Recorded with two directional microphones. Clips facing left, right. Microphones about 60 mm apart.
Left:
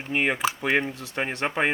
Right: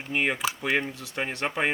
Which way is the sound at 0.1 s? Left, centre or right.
Left.